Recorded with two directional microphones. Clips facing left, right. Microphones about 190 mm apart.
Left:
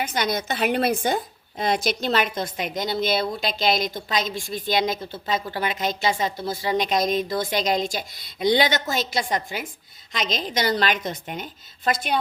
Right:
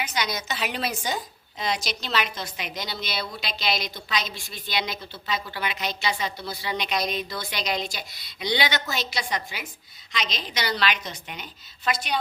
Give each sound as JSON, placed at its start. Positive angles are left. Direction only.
{"t": 0.0, "sound": "a woman's voice", "side_deg": 50}